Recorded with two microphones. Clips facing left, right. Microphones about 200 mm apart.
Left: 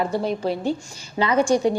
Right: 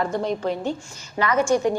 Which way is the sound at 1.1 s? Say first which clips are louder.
Left 1 dB; 30° left (ahead or behind).